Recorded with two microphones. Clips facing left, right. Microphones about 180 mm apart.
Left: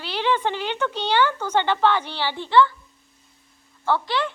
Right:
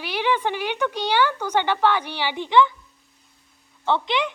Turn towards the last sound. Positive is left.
turn(degrees=-20)  # may be behind; listen again after turning